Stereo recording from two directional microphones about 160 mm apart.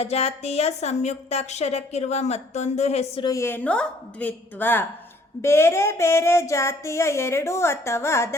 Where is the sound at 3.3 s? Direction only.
15° left (ahead or behind).